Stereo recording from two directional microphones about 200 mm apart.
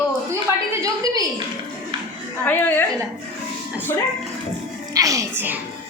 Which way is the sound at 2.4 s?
10° left (ahead or behind).